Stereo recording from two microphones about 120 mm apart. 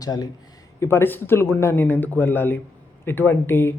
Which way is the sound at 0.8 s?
20° left (ahead or behind).